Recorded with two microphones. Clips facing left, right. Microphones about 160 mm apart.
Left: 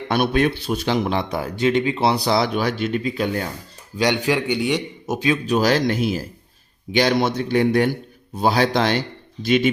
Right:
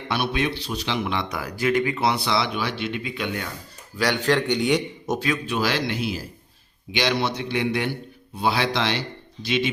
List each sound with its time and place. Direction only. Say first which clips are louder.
0.1 s a man's voice: left 6 dB; 50° left (ahead or behind)
3.9 s a man's voice: left 2 dB; 20° left (ahead or behind)
5.5 s a man's voice: left 9 dB; 40° left (ahead or behind)